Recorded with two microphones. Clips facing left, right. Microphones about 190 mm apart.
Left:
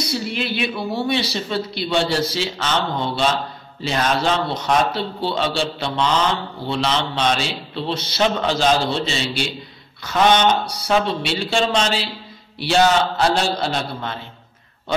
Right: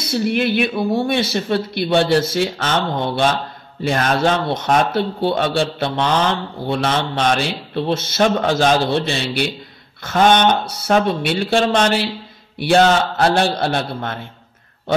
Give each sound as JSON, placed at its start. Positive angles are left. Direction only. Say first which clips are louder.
{"t": 0.0, "sound": "a man's voice", "louder": "right 6 dB", "side_deg": -55}